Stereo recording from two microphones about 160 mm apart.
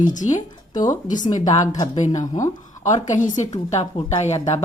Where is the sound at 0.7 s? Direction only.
55° left (ahead or behind).